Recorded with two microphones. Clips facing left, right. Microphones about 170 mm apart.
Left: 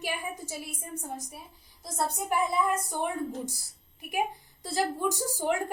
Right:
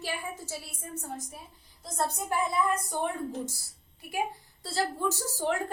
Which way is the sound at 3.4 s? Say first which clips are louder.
Left 1 dB; 15° left (ahead or behind).